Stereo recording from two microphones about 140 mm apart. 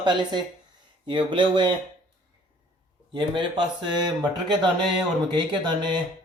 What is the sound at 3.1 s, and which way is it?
Speech, 35° right (ahead or behind).